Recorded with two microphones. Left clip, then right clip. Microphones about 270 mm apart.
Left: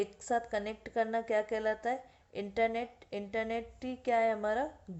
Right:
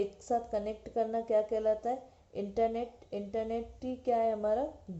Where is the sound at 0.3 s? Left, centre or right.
Left.